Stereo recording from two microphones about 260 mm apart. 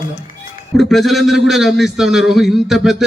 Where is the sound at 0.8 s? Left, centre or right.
Centre.